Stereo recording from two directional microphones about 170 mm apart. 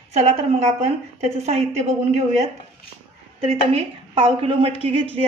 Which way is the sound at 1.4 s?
40° right (ahead or behind).